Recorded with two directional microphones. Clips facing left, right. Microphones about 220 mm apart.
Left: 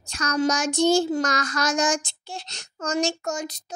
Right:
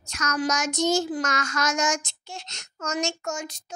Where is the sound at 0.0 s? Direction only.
30° left (ahead or behind).